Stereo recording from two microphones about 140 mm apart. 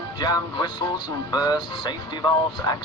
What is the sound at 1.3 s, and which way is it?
Speech, 30° left (ahead or behind).